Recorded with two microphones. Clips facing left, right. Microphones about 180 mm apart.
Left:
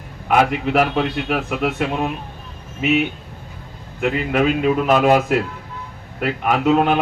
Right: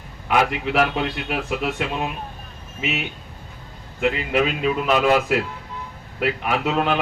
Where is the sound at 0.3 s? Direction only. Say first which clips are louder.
Left 4 dB; 50° left (ahead or behind).